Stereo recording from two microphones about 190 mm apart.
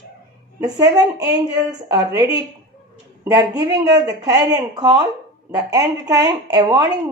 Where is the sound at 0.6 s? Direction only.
20° right (ahead or behind).